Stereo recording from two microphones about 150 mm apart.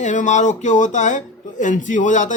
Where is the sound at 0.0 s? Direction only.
55° left (ahead or behind).